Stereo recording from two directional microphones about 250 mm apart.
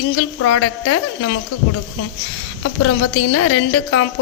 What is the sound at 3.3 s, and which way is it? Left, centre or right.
Speech, left.